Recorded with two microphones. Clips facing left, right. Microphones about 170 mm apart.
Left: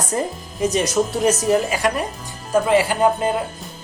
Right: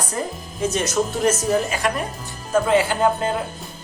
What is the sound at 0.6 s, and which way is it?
Speech, 15° left (ahead or behind).